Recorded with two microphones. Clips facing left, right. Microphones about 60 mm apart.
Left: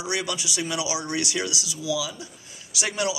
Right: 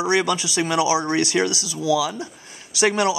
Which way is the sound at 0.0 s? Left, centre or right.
Right.